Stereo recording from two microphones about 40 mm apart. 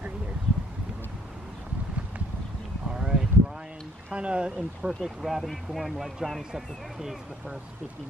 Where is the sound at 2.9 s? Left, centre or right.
Centre.